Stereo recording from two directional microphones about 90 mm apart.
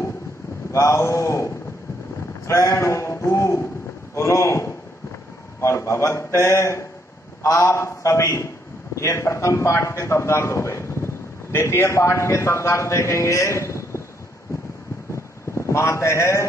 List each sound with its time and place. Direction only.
0.7 s a man's voice: 35° left (ahead or behind)
15.5 s speech: 30° left (ahead or behind)